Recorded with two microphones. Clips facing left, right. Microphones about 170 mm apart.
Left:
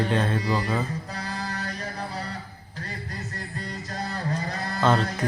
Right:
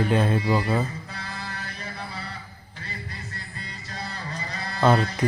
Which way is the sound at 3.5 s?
45° left (ahead or behind).